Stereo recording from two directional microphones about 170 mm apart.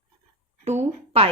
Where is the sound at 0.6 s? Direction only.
40° right (ahead or behind).